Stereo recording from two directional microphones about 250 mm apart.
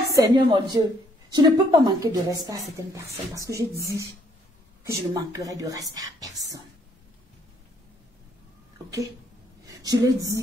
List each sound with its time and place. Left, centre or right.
0.1 s a woman's voice: centre
9.7 s a woman's voice: centre